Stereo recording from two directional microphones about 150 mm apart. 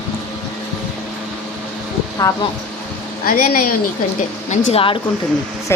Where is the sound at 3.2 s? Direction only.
70° left (ahead or behind).